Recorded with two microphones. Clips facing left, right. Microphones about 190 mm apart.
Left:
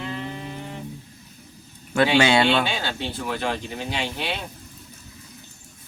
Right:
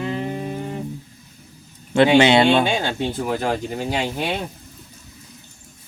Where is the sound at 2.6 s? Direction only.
45° right (ahead or behind).